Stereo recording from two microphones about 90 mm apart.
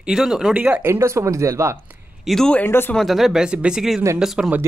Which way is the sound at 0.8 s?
30° right (ahead or behind).